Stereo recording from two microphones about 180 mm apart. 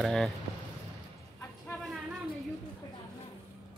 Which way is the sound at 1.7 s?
Centre (ahead or behind).